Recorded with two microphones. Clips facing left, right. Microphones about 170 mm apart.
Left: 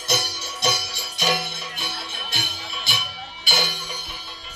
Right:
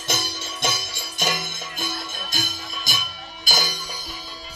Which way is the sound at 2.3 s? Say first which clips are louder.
Right 3 dB; 45° right (ahead or behind).